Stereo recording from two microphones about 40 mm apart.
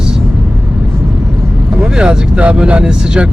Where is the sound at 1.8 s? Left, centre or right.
Right.